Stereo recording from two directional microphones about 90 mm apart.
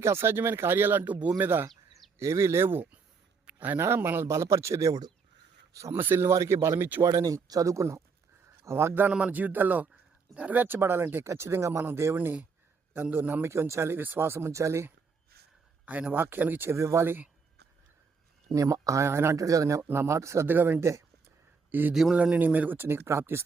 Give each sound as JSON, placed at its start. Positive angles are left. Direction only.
{"t": 0.0, "sound": "speech", "side_deg": -30}
{"t": 2.1, "sound": "speech", "side_deg": -30}
{"t": 3.4, "sound": "a sound", "side_deg": -15}
{"t": 3.8, "sound": "speech", "side_deg": -25}
{"t": 5.9, "sound": "speech", "side_deg": -25}
{"t": 7.0, "sound": "speech", "side_deg": -40}
{"t": 15.9, "sound": "speech", "side_deg": -15}
{"t": 18.5, "sound": "speech", "side_deg": -35}
{"t": 20.5, "sound": "a man's voice", "side_deg": -20}